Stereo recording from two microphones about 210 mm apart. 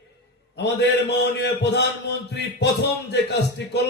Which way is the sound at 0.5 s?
55° left (ahead or behind).